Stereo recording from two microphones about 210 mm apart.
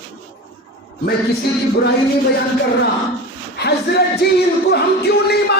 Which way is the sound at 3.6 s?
50° left (ahead or behind).